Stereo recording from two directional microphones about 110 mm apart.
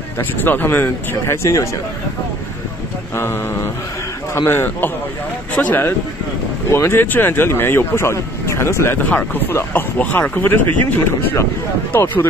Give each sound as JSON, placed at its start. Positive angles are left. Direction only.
{"t": 0.2, "sound": "speech", "side_deg": 20}
{"t": 4.4, "sound": "speech", "side_deg": 20}
{"t": 11.9, "sound": "speech", "side_deg": 20}